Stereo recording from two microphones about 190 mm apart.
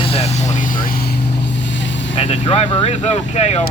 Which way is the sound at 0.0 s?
30° left (ahead or behind).